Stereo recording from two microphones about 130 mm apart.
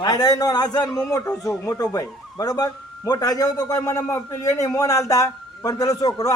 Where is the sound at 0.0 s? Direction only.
30° left (ahead or behind).